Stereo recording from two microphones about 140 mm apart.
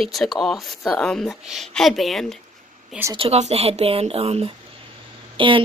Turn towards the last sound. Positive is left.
turn(degrees=-35)  # may be behind; listen again after turning